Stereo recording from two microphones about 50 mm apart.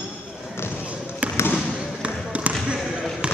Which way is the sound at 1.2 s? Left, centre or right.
Right.